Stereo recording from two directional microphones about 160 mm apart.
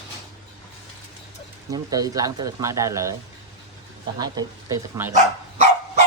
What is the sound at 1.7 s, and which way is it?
Speech, 20° right (ahead or behind).